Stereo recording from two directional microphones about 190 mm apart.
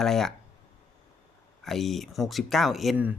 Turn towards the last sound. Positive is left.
turn(degrees=-5)  # may be behind; listen again after turning